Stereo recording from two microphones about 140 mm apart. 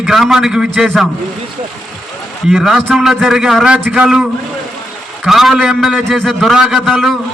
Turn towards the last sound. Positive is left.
turn(degrees=0)  # may be behind; listen again after turning